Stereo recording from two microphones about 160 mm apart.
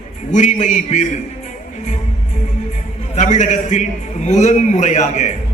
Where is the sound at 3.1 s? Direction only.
50° left (ahead or behind).